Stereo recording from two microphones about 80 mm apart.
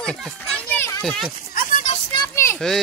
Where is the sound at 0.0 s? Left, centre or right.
Centre.